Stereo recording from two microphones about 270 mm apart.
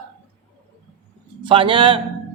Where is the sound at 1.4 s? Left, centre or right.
Centre.